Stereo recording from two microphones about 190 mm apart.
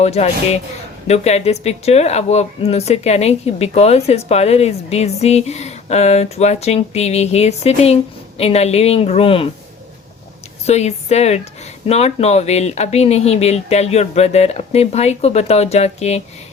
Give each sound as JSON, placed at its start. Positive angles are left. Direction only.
{"t": 0.0, "sound": "speech", "side_deg": 35}
{"t": 10.7, "sound": "speech", "side_deg": 35}